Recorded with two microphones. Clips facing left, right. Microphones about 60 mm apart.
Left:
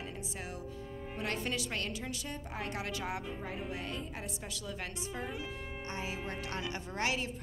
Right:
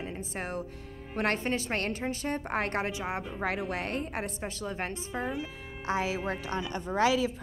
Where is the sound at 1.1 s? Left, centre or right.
Right.